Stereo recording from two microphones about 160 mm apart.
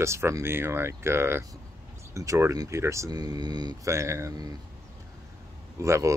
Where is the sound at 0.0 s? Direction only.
15° right (ahead or behind).